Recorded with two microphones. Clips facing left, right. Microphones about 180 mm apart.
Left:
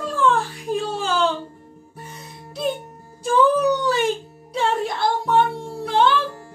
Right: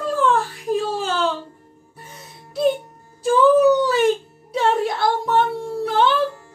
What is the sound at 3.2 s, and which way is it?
Music, 5° right (ahead or behind).